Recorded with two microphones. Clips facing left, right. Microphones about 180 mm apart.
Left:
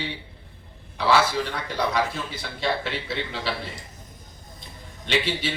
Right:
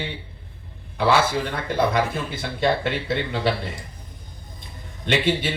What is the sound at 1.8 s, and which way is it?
A man's voice, 55° right (ahead or behind).